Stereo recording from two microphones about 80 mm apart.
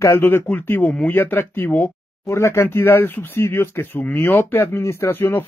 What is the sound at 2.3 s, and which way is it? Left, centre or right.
Speech, left.